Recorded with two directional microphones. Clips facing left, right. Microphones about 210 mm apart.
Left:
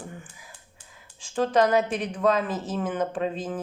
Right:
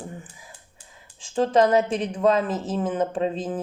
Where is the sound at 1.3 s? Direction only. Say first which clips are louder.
Right 3 dB; 25° right (ahead or behind).